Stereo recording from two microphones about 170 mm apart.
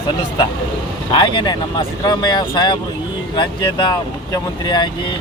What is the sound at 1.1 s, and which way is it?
Speech, 30° left (ahead or behind).